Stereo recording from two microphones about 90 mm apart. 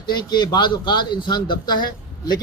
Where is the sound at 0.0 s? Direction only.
55° left (ahead or behind).